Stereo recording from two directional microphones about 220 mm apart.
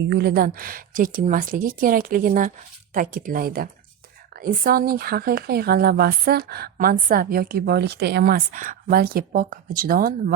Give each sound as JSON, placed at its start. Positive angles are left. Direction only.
{"t": 0.1, "sound": "speech", "side_deg": -45}